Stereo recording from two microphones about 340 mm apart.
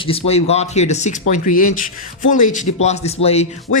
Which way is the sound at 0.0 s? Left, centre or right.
Centre.